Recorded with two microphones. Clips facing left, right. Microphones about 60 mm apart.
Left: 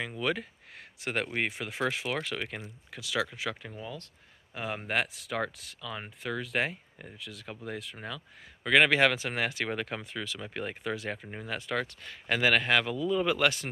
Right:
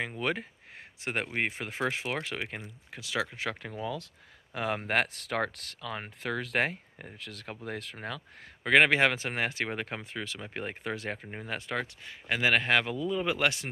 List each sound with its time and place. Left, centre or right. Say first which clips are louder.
0.1 s speech: left 1 dB; right
3.6 s speech: right 5 dB; right
4.6 s speech: right 3 dB; right
8.6 s speech: even; right
11.1 s speech: even; right